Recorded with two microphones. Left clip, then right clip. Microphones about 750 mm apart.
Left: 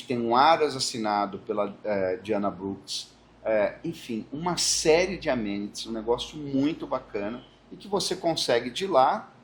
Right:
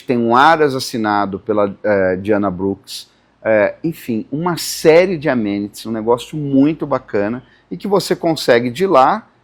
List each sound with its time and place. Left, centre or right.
0.1 s speech: right